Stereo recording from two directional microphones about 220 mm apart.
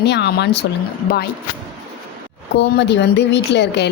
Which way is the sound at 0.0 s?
50° left (ahead or behind).